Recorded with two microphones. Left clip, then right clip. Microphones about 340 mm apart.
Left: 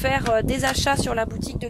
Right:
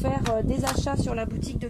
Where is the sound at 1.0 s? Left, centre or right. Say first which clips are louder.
Left 6 dB; left.